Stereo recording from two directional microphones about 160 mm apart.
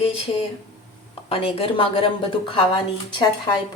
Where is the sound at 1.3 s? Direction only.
35° left (ahead or behind).